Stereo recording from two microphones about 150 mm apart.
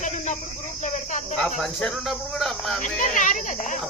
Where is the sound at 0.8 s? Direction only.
55° left (ahead or behind).